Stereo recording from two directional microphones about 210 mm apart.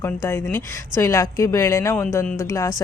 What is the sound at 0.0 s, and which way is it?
A woman's voice, 10° left (ahead or behind).